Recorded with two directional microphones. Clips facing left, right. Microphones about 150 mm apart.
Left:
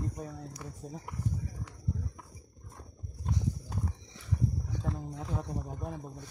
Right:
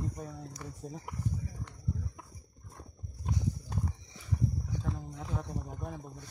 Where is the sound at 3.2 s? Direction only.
Centre (ahead or behind).